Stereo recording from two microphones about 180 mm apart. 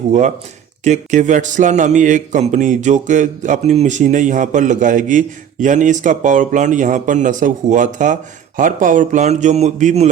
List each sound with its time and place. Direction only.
0.1 s speech: 40° right (ahead or behind)